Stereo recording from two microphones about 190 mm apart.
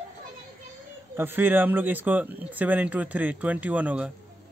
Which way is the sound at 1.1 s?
10° right (ahead or behind).